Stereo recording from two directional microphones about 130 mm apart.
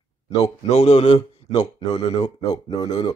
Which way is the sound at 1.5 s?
35° left (ahead or behind).